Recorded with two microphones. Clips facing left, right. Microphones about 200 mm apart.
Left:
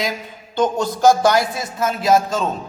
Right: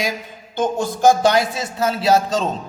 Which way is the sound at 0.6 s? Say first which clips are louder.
Left 2 dB; 50° right (ahead or behind).